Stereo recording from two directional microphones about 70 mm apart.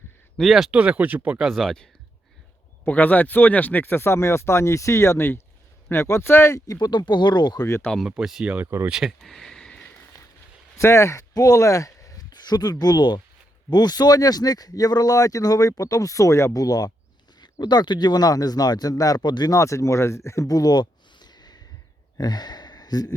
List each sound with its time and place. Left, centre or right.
0.3 s speech: centre
0.7 s speech: centre
1.4 s speech: centre
2.8 s speech: left
6.7 s speech: left
8.2 s speech: centre
9.3 s a sound: centre
10.8 s speech: left
11.3 s speech: left
12.3 s a sound: left
12.8 s speech: left
17.4 s speech: left
19.5 s speech: left